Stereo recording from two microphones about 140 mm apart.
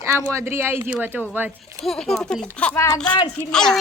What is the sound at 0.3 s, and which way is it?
Speech, 15° right (ahead or behind).